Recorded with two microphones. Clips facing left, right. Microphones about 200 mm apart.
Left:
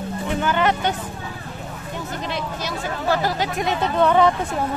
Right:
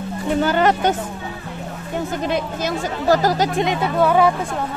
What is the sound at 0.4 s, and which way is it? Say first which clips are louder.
Speech: right 4 dB; 40° right (ahead or behind).